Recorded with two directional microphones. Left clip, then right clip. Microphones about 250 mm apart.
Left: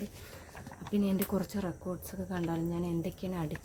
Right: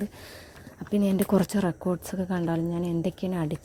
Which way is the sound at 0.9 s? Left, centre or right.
Right.